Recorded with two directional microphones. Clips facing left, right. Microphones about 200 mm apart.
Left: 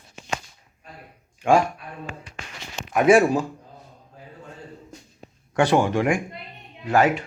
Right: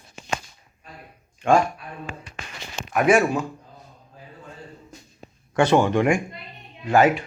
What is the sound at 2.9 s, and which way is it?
Speech, 25° left (ahead or behind).